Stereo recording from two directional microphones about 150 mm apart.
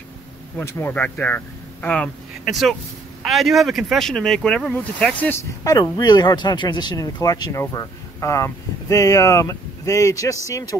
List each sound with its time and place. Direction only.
0.6 s speech: 15° left (ahead or behind)
5.6 s speech: 25° left (ahead or behind)